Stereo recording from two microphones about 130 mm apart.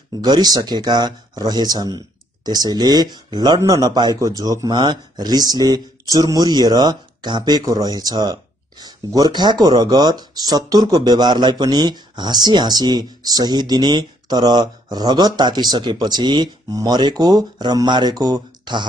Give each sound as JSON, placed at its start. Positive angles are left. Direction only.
{"t": 0.2, "sound": "speech", "side_deg": -30}